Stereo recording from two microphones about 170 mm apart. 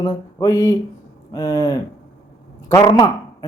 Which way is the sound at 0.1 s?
15° left (ahead or behind).